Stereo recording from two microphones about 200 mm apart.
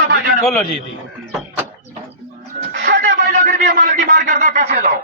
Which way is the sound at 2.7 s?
50° right (ahead or behind).